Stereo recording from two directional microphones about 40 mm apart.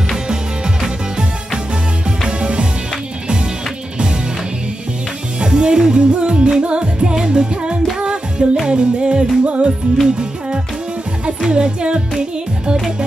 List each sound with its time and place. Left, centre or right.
0.1 s music: centre
5.4 s music: right